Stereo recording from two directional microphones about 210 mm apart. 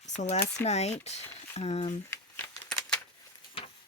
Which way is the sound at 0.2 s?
35° left (ahead or behind).